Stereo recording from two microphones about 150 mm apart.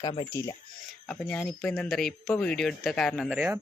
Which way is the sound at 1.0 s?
5° left (ahead or behind).